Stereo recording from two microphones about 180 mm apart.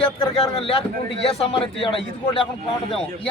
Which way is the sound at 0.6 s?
30° left (ahead or behind).